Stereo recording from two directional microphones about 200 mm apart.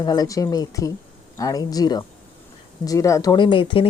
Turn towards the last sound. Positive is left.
turn(degrees=25)  # may be behind; listen again after turning